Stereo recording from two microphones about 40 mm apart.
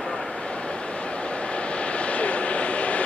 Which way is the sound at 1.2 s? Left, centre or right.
Left.